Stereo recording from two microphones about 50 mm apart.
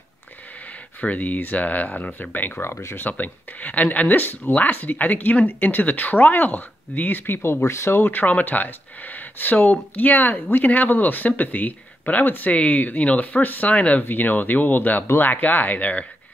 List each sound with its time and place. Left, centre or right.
1.0 s speech: left
2.6 s speech: left
3.1 s speech: left
7.6 s speech: left